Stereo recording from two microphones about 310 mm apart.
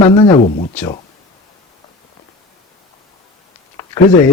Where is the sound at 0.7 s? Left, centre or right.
Centre.